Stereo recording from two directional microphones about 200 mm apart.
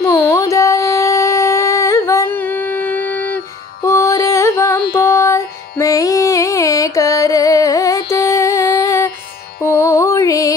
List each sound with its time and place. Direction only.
0.0 s carnatic music: 15° left (ahead or behind)
4.9 s music: 15° left (ahead or behind)